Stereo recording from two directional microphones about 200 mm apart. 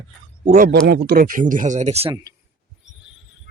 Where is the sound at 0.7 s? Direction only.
50° right (ahead or behind); by 2.1 s 30° right (ahead or behind).